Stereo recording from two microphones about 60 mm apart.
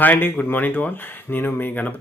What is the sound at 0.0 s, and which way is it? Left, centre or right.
Speech, left.